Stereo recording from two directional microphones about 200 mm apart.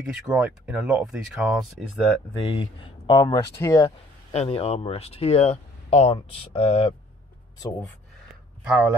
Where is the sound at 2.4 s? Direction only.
25° left (ahead or behind).